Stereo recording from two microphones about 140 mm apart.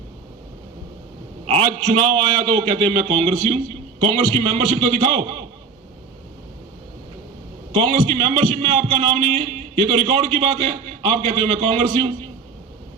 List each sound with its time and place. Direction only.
1.5 s a man's voice: 45° right (ahead or behind)
7.7 s a man's voice: 45° right (ahead or behind)